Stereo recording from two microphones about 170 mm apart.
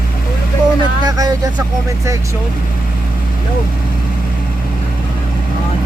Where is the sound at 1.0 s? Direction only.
20° right (ahead or behind).